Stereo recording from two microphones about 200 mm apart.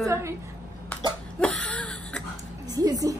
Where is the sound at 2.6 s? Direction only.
20° right (ahead or behind).